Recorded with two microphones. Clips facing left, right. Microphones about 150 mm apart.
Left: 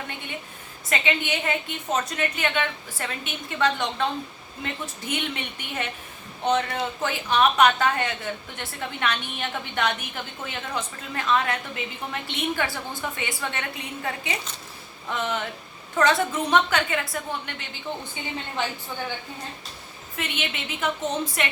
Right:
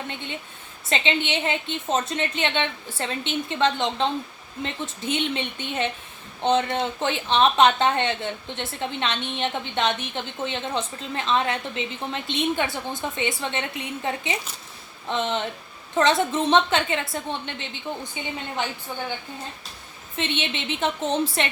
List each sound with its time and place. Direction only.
0.9 s a woman's voice: 25° right (ahead or behind)
20.1 s a woman's voice: 25° right (ahead or behind)